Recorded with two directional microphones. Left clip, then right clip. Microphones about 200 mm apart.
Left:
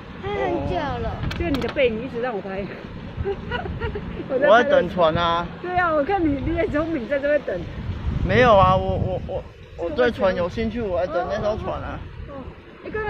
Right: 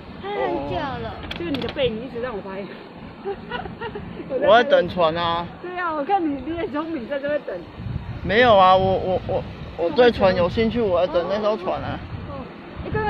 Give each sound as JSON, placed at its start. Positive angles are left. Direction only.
{"t": 0.2, "sound": "a sound", "side_deg": 10}
{"t": 1.3, "sound": "speech", "side_deg": 20}
{"t": 4.5, "sound": "speech", "side_deg": -10}
{"t": 5.8, "sound": "speech", "side_deg": 25}
{"t": 8.3, "sound": "speech", "side_deg": -10}